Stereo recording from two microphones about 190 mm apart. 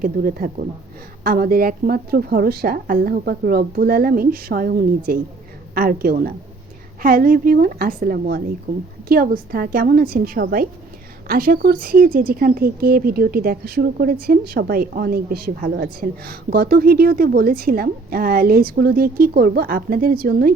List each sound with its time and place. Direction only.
0.0 s speech: 50° right (ahead or behind)